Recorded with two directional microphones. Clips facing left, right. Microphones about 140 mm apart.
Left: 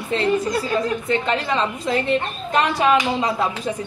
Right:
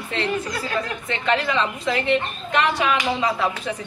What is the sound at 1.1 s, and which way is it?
A woman's voice, 35° left (ahead or behind).